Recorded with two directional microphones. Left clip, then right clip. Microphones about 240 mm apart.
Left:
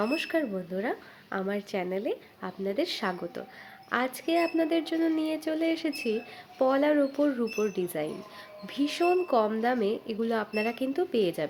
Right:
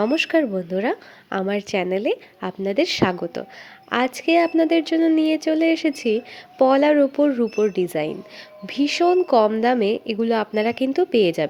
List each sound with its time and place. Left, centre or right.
0.0 s a woman's voice: right